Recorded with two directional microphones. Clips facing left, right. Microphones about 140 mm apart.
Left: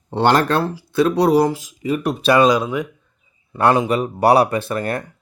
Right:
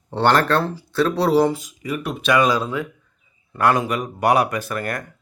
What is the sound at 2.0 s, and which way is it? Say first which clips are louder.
Speech: left 4 dB; 35° left (ahead or behind).